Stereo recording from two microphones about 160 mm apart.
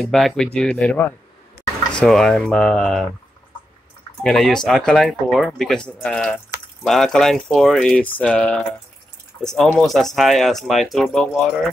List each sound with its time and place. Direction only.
0.0 s speech: centre (ahead or behind)
4.2 s speech: 5° left (ahead or behind)